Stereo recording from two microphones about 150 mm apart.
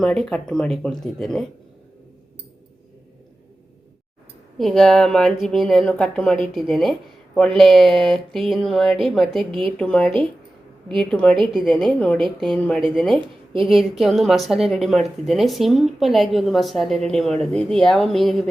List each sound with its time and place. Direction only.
0.0 s a woman's voice: 5° left (ahead or behind)
4.5 s a woman's voice: 5° left (ahead or behind)
9.5 s a woman's voice: 35° right (ahead or behind)
9.7 s a woman's voice: 5° left (ahead or behind)